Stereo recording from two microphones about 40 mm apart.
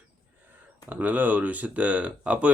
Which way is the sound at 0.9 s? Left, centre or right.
Right.